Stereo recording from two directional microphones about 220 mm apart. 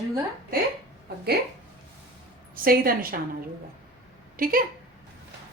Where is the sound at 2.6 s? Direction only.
40° right (ahead or behind).